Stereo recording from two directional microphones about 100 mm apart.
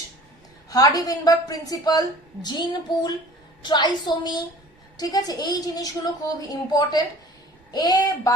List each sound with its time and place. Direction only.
0.7 s a woman's voice: 35° left (ahead or behind)